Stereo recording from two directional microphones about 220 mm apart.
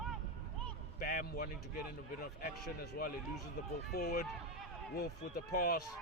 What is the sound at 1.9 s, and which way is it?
Speech, 45° left (ahead or behind).